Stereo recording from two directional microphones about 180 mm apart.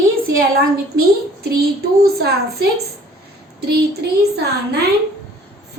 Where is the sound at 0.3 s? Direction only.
55° right (ahead or behind).